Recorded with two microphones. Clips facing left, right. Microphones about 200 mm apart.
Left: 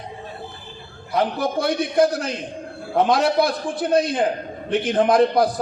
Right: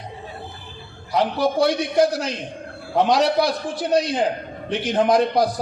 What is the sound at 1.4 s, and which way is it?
A man's voice, 55° left (ahead or behind).